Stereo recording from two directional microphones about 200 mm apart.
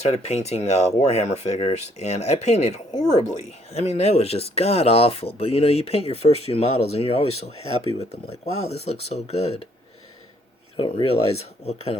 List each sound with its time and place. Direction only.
0.1 s speech: 35° left (ahead or behind)
10.8 s speech: 25° left (ahead or behind)